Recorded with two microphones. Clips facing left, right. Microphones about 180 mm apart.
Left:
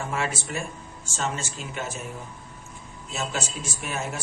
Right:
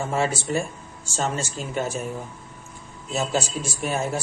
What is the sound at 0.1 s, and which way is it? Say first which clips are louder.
A man's voice: right 6 dB; 30° right (ahead or behind).